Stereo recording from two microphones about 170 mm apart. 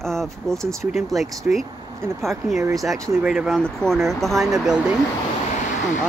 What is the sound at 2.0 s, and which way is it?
Speech, 15° right (ahead or behind).